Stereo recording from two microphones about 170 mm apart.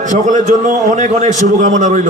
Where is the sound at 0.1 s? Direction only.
45° right (ahead or behind).